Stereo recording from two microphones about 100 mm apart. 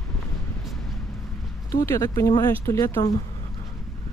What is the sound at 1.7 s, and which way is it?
Speech, 30° left (ahead or behind).